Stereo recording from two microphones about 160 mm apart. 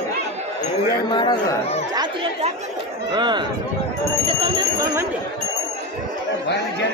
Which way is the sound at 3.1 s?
30° right (ahead or behind).